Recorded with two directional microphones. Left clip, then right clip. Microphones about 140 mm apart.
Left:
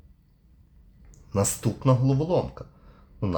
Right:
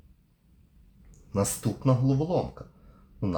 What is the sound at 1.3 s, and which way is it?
Speech, 30° left (ahead or behind).